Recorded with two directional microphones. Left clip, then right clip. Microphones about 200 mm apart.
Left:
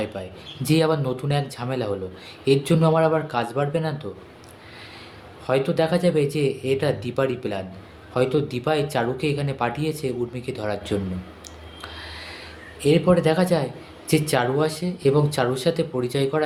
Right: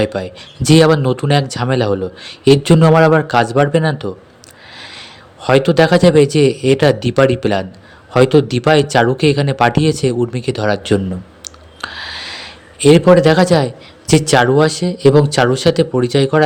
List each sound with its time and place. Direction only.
0.0 s a man's voice: 45° right (ahead or behind)
11.4 s a sound: 45° right (ahead or behind)
14.1 s speech: 45° right (ahead or behind)